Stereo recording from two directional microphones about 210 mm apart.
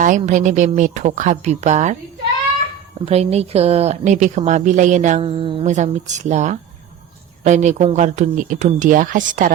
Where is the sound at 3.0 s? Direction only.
30° right (ahead or behind).